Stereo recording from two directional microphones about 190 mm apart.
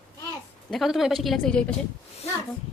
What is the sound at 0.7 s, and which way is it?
A woman's voice, centre (ahead or behind).